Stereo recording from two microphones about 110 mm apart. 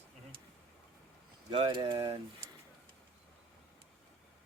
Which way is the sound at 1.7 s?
50° right (ahead or behind).